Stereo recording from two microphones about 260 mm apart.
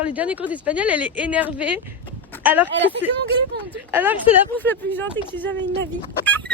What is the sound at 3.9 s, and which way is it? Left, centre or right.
Speech, centre.